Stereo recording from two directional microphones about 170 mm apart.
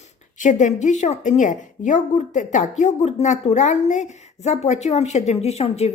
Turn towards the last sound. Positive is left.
turn(degrees=40)  # may be behind; listen again after turning